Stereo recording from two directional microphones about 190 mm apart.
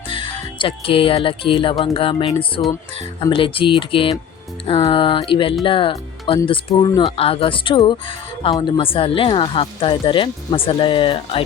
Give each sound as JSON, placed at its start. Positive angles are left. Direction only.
{"t": 0.1, "sound": "speech", "side_deg": 25}